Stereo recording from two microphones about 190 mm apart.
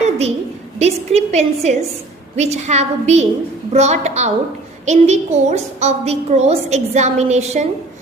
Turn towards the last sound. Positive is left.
turn(degrees=-35)  # may be behind; listen again after turning